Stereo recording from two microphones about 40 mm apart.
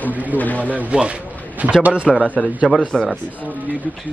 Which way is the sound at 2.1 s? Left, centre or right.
Centre.